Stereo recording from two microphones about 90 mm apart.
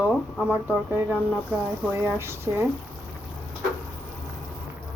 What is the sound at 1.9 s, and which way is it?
Speech, 30° right (ahead or behind).